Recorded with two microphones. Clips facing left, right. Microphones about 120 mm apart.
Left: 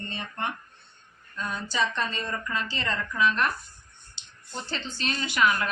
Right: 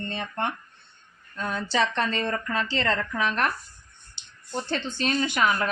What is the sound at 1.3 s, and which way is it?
Speech, 55° right (ahead or behind).